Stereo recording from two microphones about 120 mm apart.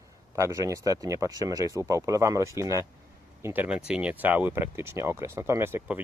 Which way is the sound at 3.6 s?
10° right (ahead or behind).